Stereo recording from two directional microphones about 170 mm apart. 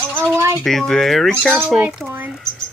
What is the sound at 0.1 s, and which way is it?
Speech, 15° right (ahead or behind).